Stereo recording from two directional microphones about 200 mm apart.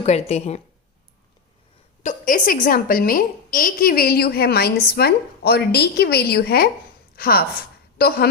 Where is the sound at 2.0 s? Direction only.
40° left (ahead or behind).